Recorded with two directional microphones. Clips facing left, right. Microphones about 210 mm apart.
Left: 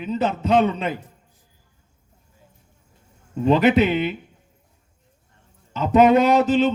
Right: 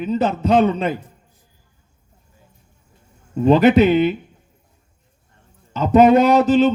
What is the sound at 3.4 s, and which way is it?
Speech, 40° right (ahead or behind).